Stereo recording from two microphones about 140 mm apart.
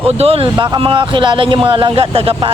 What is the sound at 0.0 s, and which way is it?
Speech, 45° right (ahead or behind).